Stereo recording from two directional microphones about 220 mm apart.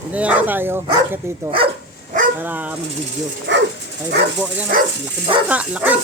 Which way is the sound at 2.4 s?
10° right (ahead or behind).